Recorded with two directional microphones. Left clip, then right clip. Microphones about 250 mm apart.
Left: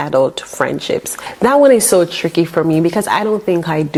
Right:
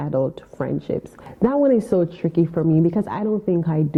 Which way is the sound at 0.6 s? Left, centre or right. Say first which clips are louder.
Left 8 dB; centre.